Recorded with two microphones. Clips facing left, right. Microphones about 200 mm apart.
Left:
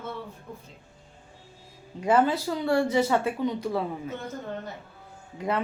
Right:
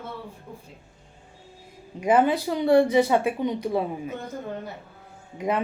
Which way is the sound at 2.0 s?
15° right (ahead or behind).